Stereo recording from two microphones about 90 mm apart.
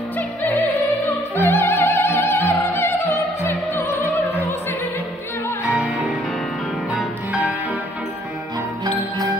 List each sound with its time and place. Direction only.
1.3 s opera: 25° left (ahead or behind)
5.7 s music: 15° right (ahead or behind)